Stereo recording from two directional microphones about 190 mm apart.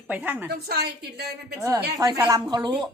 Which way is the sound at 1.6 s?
15° right (ahead or behind).